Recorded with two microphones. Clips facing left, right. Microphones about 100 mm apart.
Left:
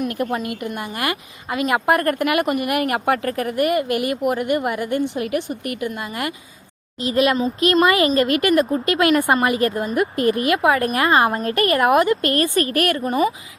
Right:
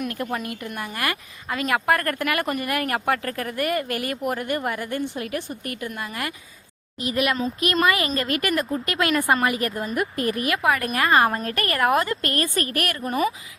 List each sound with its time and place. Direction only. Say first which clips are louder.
0.2 s a woman's voice: left 5 dB; 20° left (ahead or behind)